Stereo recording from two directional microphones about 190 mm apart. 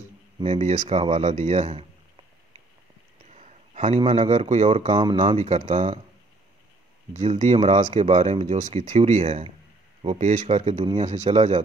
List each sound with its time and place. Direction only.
0.4 s speech: 35° right (ahead or behind)
3.3 s speech: 35° right (ahead or behind)
7.2 s speech: 35° right (ahead or behind)